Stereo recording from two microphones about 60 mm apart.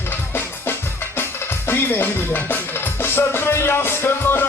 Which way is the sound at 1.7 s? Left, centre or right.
Left.